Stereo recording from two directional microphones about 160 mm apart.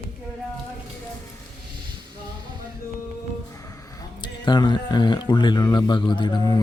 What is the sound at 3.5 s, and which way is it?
Speech, 20° left (ahead or behind).